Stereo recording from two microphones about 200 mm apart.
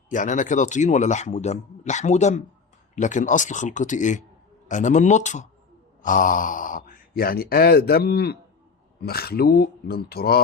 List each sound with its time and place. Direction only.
0.1 s speech: 40° left (ahead or behind)